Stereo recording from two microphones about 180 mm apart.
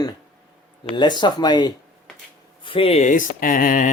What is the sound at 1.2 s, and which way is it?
Speech, 25° left (ahead or behind).